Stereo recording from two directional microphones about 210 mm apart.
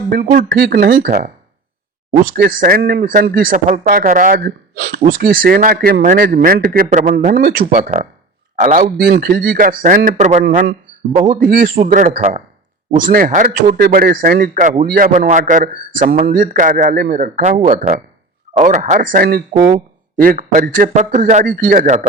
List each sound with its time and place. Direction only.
0.1 s speech: 45° right (ahead or behind)
2.2 s a man's voice: 45° right (ahead or behind)